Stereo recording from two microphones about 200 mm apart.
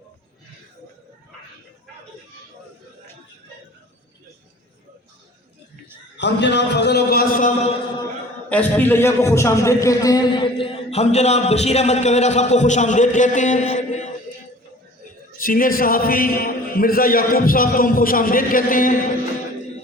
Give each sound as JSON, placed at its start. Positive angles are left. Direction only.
{"t": 6.1, "sound": "a man's voice", "side_deg": 60}
{"t": 8.4, "sound": "a man's voice", "side_deg": 10}
{"t": 15.4, "sound": "a man's voice", "side_deg": 45}